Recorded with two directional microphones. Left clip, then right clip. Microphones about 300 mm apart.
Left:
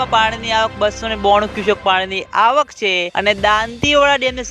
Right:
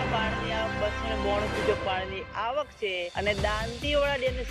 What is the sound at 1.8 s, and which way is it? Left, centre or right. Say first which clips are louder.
Speech: left 15 dB; left.